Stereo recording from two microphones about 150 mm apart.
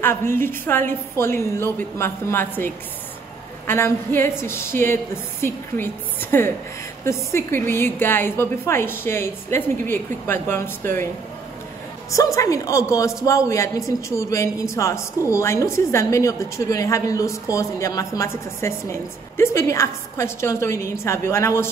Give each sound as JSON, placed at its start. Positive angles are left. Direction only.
{"t": 0.0, "sound": "a woman's voice", "side_deg": 15}
{"t": 12.4, "sound": "speech", "side_deg": 20}